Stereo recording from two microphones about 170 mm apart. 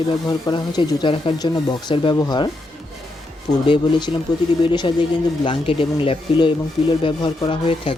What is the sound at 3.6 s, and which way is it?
Speech, 30° left (ahead or behind).